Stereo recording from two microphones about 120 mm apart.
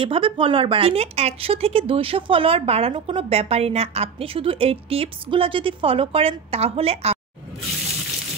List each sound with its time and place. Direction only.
0.0 s speech: 45° right (ahead or behind)